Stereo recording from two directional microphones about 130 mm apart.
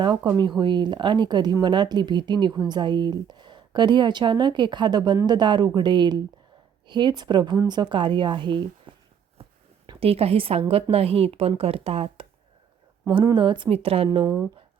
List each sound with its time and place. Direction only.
0.3 s speech: 30° right (ahead or behind)
8.9 s a sound: 40° right (ahead or behind)
9.8 s a woman's voice: 40° right (ahead or behind)
13.3 s speech: 40° right (ahead or behind)